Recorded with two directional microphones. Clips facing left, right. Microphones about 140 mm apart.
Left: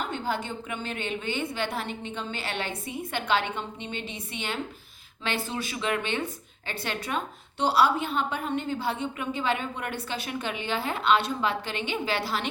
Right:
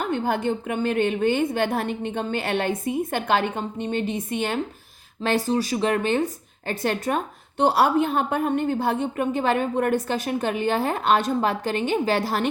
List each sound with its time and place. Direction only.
0.0 s a woman's voice: 50° right (ahead or behind)